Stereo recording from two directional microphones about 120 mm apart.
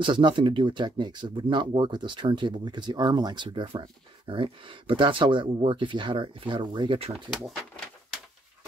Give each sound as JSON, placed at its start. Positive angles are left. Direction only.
{"t": 0.0, "sound": "speech", "side_deg": -40}